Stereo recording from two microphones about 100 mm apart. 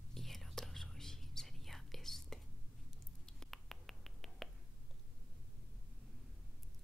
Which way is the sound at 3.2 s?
5° left (ahead or behind).